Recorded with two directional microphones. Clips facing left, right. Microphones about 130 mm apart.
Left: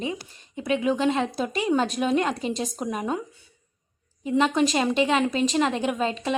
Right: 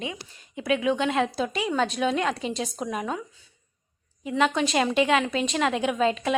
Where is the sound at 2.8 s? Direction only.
10° left (ahead or behind).